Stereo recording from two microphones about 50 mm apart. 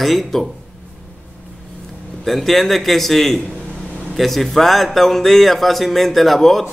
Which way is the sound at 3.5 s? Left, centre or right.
Centre.